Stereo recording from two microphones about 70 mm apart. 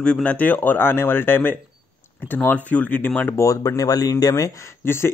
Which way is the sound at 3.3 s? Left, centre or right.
Left.